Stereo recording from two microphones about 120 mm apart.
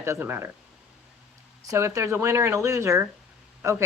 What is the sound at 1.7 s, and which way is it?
Speech, 25° right (ahead or behind).